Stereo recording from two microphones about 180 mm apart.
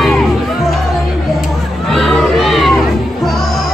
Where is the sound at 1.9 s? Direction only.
Centre (ahead or behind).